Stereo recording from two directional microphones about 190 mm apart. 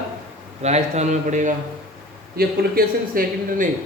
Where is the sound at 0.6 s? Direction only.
35° right (ahead or behind).